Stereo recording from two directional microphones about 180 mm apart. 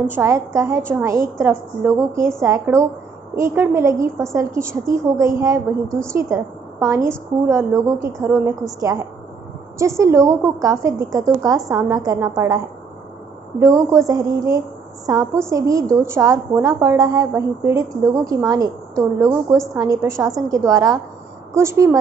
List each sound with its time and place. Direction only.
0.0 s a woman's voice: 10° right (ahead or behind)